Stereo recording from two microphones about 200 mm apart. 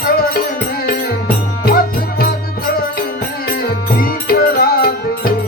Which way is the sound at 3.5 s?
45° left (ahead or behind).